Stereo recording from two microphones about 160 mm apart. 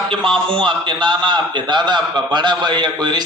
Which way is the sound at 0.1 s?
5° left (ahead or behind).